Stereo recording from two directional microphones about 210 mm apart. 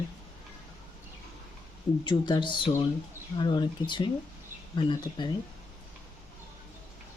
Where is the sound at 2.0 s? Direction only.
20° left (ahead or behind).